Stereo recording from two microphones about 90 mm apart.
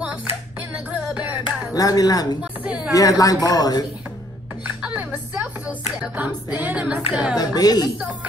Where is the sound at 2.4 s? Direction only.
15° right (ahead or behind).